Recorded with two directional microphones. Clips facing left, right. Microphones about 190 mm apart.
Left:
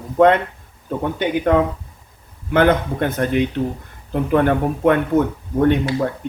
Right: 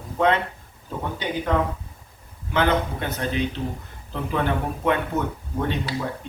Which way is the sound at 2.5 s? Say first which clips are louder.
Left 6 dB; 50° left (ahead or behind).